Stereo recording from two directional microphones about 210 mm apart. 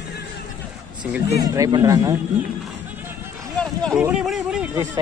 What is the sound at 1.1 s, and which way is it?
Speech, 15° right (ahead or behind).